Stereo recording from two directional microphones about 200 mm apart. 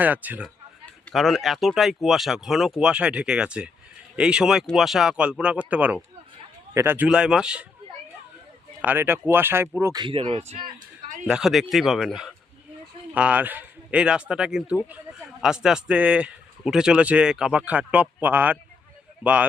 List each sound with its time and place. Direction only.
0.0 s speech: 10° right (ahead or behind)
8.8 s speech: 10° right (ahead or behind); by 10.7 s 25° right (ahead or behind)
10.7 s a sound: 40° right (ahead or behind)
11.3 s speech: centre (ahead or behind)